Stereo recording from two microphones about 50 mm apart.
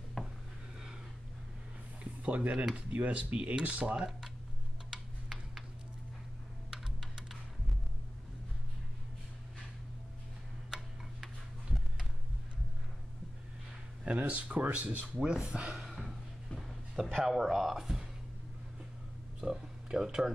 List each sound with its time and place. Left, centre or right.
0.2 s a sound: centre
2.2 s speech: right
4.9 s tick-tock: centre
10.7 s tick-tock: centre
14.0 s speech: right
15.1 s speech: centre
15.4 s speech: right
15.8 s a sound: centre
17.2 s speech: centre
19.4 s speech: centre